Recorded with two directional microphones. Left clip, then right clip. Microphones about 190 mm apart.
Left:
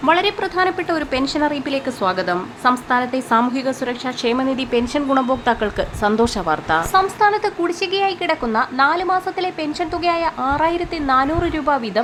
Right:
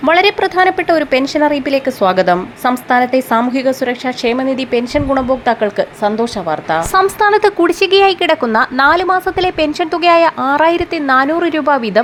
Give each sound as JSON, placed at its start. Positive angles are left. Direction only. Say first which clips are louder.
{"t": 0.0, "sound": "a woman's voice", "louder": "right 6 dB", "side_deg": -20}
{"t": 6.9, "sound": "a woman's voice", "louder": "right 6 dB", "side_deg": -30}